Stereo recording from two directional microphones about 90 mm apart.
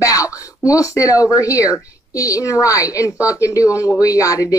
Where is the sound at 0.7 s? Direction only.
40° left (ahead or behind).